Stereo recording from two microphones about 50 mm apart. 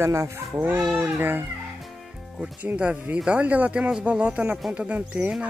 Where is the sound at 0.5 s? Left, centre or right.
Right.